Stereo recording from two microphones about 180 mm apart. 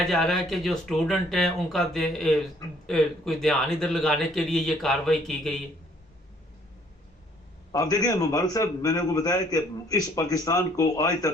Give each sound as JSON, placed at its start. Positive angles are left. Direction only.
{"t": 0.0, "sound": "a man's voice", "side_deg": 0}
{"t": 7.7, "sound": "a man's voice", "side_deg": 20}